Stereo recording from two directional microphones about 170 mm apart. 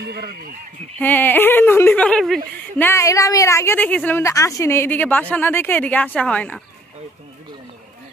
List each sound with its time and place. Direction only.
0.0 s speech: 70° right (ahead or behind)
0.9 s speech: 10° left (ahead or behind)
2.9 s a woman's voice: 20° left (ahead or behind)